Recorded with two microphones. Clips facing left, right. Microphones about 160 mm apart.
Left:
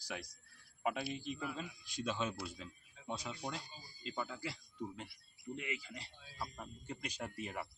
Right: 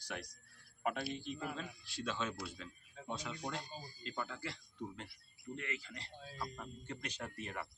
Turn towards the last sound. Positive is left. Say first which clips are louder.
# left 1 dB
turn(degrees=10)  # may be behind; listen again after turning